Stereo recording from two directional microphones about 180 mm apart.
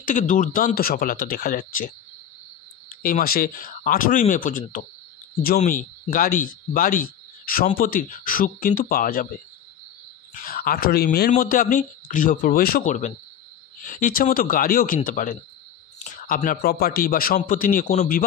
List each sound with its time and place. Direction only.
0.0 s speech: 45° left (ahead or behind)
3.0 s speech: 55° left (ahead or behind)